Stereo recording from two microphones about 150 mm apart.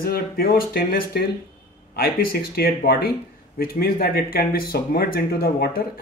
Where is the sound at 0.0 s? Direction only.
85° left.